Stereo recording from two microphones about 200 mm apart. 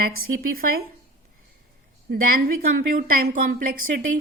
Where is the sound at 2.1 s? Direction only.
45° right (ahead or behind).